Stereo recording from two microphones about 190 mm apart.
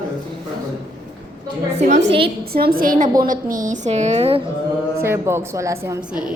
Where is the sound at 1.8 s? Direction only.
35° right (ahead or behind).